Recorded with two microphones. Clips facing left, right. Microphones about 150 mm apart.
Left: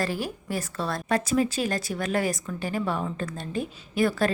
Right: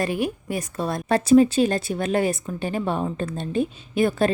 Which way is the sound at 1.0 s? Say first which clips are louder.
Right 9 dB; 30° right (ahead or behind).